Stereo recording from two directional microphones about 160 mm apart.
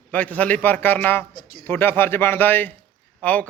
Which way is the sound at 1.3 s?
65° left (ahead or behind).